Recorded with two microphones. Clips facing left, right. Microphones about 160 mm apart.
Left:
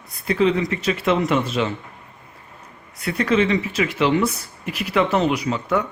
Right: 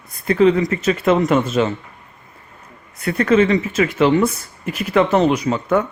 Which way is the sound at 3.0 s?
50° right (ahead or behind).